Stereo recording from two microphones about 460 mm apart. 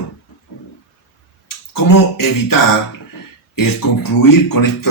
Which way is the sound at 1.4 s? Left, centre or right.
Left.